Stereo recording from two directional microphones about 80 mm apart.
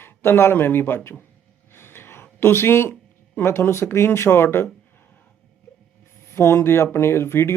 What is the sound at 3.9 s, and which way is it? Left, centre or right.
Speech, left.